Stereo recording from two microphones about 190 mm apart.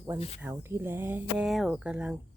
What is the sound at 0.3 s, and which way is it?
Speech, 10° right (ahead or behind).